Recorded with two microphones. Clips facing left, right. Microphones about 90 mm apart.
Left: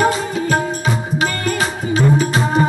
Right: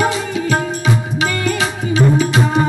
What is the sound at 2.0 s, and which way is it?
Music, 35° left (ahead or behind).